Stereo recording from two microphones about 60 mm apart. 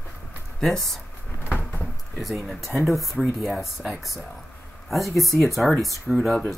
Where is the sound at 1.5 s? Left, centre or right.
Left.